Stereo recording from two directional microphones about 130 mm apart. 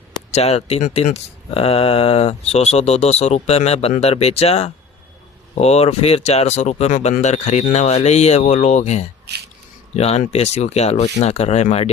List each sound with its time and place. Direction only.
0.3 s speech: 55° left (ahead or behind)